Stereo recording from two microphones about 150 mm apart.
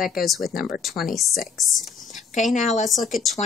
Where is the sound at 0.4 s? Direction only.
85° left.